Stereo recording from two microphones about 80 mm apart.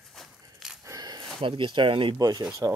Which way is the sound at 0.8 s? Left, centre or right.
Right.